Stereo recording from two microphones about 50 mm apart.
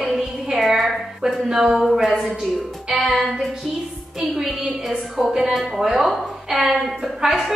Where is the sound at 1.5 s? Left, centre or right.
Centre.